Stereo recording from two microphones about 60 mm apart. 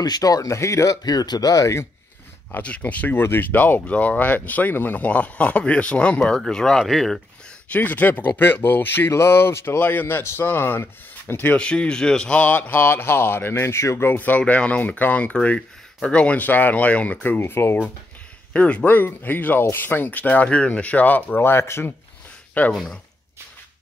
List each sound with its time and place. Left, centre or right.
0.2 s speech: left
2.5 s speech: left
3.2 s speech: left
3.5 s speech: left
6.3 s speech: centre
7.7 s speech: left
11.5 s speech: centre
14.4 s speech: centre; by 17.8 s left
18.5 s speech: left
21.4 s speech: left
22.7 s speech: centre